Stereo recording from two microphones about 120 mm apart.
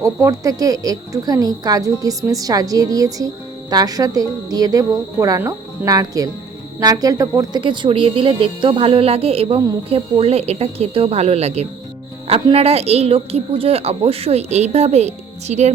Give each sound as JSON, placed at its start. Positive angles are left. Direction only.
{"t": 0.0, "sound": "a woman's voice", "side_deg": -25}
{"t": 7.6, "sound": "a woman's voice", "side_deg": -40}